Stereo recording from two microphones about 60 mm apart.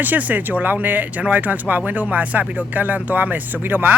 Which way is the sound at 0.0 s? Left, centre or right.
Right.